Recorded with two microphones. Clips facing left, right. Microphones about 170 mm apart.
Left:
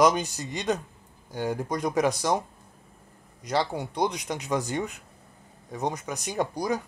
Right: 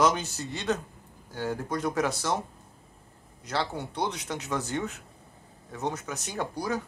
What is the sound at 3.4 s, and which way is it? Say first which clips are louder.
Speech: left 4 dB; 15° left (ahead or behind).